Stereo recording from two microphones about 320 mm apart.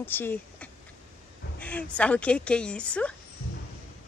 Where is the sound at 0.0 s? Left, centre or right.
Centre.